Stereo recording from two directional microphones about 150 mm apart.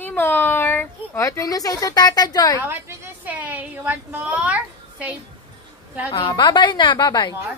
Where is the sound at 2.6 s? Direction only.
15° right (ahead or behind).